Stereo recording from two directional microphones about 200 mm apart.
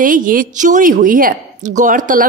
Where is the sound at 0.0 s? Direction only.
40° right (ahead or behind).